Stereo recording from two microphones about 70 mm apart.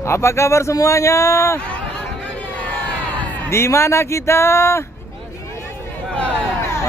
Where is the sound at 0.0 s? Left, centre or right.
Left.